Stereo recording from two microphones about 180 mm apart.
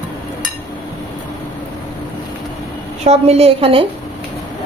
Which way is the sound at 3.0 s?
35° right (ahead or behind).